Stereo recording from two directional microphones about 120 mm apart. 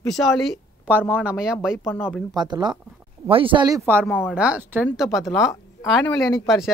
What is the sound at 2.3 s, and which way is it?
Speech, 35° right (ahead or behind).